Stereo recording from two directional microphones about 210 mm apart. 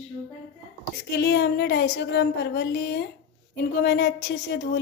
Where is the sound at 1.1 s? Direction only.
55° left (ahead or behind).